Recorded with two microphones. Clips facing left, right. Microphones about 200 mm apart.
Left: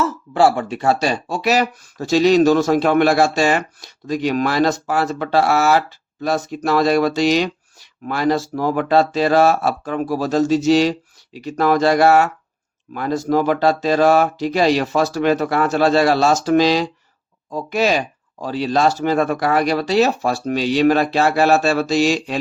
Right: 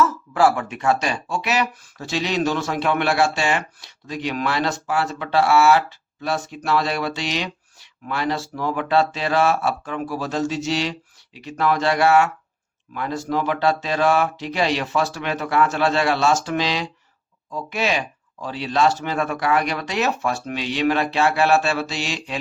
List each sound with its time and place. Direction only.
0.0 s speech: 30° left (ahead or behind)